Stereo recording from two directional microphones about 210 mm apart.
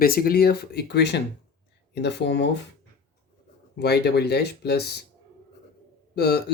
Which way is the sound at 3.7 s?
50° left (ahead or behind).